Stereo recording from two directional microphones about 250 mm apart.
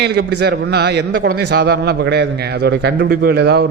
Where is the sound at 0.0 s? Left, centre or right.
Right.